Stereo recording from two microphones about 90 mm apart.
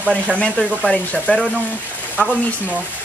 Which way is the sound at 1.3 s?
15° left (ahead or behind).